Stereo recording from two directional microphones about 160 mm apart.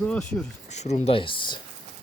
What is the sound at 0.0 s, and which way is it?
Speech, 10° left (ahead or behind).